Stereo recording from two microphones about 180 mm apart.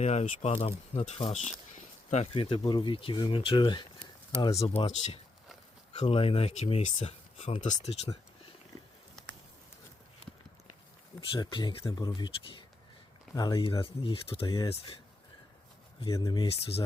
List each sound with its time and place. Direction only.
0.0 s speech: 40° left (ahead or behind); by 4.8 s 20° left (ahead or behind)
4.8 s speech: 35° left (ahead or behind)
11.3 s speech: 25° left (ahead or behind)
16.0 s speech: 20° left (ahead or behind)